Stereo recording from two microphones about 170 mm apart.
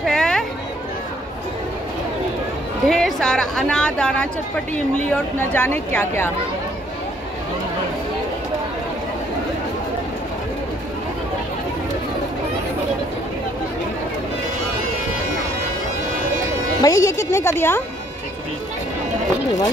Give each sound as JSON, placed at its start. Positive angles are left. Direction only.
{"t": 0.0, "sound": "a sound", "side_deg": 5}
{"t": 2.9, "sound": "a woman's voice", "side_deg": 0}
{"t": 16.8, "sound": "speech", "side_deg": 20}